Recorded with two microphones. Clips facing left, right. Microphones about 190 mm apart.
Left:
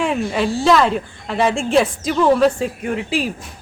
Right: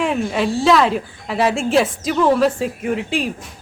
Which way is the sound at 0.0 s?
Centre (ahead or behind).